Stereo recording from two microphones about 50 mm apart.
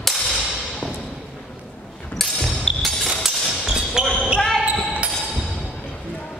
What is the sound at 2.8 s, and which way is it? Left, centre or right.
Hammer, centre.